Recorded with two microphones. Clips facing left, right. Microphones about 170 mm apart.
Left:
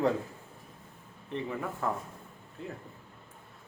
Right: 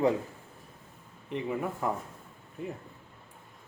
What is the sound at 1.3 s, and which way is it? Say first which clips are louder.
Speech: right 2 dB; 15° right (ahead or behind).